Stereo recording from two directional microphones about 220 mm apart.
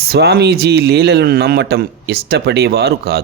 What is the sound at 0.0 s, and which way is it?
Speech, 45° right (ahead or behind).